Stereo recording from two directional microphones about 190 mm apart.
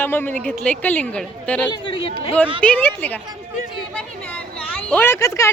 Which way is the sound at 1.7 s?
30° left (ahead or behind).